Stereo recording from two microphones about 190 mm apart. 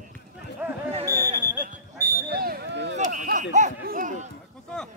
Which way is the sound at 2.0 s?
55° right (ahead or behind).